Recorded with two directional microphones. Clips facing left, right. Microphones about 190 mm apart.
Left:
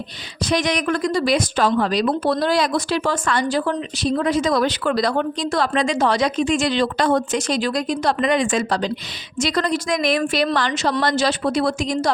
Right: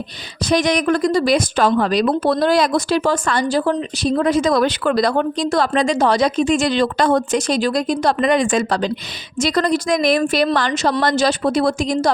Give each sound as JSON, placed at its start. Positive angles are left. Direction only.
{"t": 0.4, "sound": "a woman's voice", "side_deg": -40}